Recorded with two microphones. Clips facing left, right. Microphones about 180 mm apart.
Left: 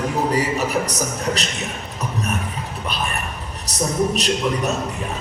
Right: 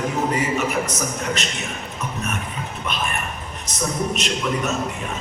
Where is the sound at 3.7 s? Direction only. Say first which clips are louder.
Left 6 dB; 35° left (ahead or behind).